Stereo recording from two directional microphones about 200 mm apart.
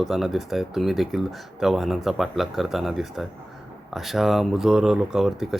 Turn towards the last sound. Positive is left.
turn(degrees=0)  # may be behind; listen again after turning